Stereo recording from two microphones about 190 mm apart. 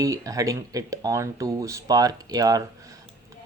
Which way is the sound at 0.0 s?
15° right (ahead or behind).